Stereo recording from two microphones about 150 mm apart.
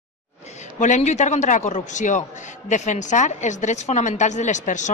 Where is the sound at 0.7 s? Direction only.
50° left (ahead or behind).